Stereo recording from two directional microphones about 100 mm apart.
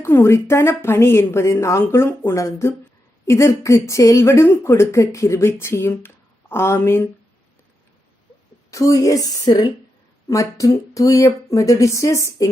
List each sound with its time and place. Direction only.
0.0 s speech: 25° left (ahead or behind)
8.7 s speech: 35° left (ahead or behind)
10.2 s speech: 30° left (ahead or behind)